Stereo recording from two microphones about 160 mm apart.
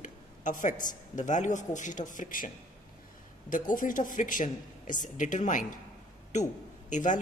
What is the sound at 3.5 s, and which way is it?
Speech, 55° left (ahead or behind).